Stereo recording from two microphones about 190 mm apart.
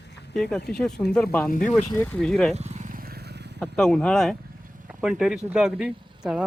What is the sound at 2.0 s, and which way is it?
Speech, 5° left (ahead or behind).